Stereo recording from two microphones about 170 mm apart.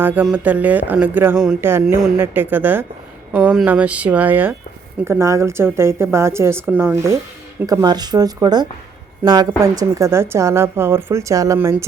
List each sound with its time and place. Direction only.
0.0 s speech: 10° right (ahead or behind)